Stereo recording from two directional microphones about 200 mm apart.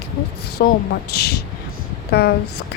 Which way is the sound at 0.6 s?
50° left (ahead or behind).